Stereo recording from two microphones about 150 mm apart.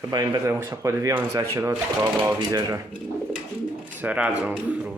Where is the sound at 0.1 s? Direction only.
25° right (ahead or behind).